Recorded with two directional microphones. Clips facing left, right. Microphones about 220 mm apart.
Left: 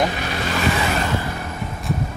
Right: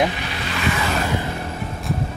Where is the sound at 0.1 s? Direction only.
45° left (ahead or behind).